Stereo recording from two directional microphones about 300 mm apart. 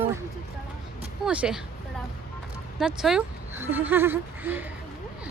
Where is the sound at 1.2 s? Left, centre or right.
Centre.